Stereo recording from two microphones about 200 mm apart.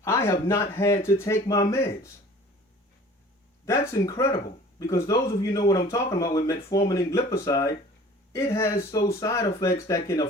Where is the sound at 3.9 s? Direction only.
15° left (ahead or behind).